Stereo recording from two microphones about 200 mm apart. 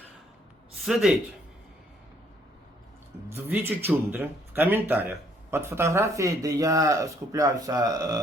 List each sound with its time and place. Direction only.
3.2 s speech: 10° right (ahead or behind)